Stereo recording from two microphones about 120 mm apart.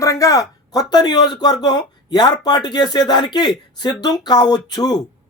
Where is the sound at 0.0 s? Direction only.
25° left (ahead or behind).